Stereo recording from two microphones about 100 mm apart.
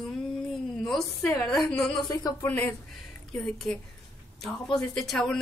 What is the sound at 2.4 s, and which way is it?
Speech, 15° left (ahead or behind).